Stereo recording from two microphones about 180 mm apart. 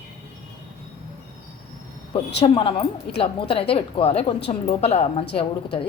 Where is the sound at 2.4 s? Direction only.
30° left (ahead or behind).